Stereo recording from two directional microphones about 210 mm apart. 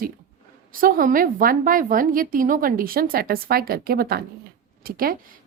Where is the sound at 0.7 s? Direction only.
40° right (ahead or behind).